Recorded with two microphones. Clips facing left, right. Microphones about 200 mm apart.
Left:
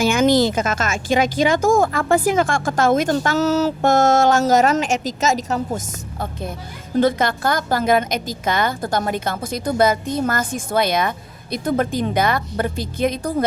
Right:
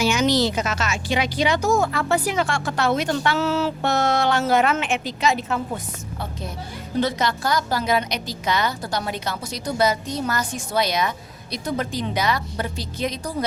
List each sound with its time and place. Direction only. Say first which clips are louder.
0.0 s speech: left 4 dB; 50° left (ahead or behind)